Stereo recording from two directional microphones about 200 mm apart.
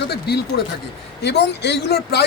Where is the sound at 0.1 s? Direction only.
55° left (ahead or behind).